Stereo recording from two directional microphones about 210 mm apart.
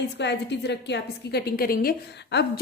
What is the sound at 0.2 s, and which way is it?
A woman's voice, 55° left (ahead or behind).